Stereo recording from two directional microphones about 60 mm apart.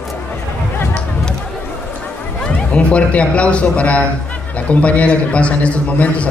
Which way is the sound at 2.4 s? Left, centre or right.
Centre.